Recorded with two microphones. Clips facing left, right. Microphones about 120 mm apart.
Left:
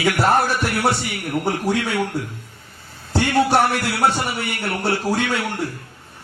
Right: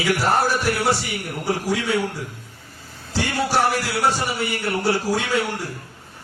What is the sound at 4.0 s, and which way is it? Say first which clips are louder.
A man's voice: left 2 dB; 55° left (ahead or behind).